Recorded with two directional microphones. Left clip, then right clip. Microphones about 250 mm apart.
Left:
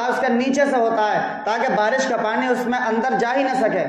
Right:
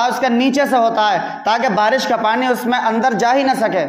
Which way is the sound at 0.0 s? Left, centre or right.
Right.